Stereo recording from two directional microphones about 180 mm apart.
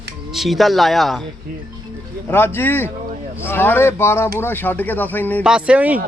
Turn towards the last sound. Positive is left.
turn(degrees=-5)  # may be behind; listen again after turning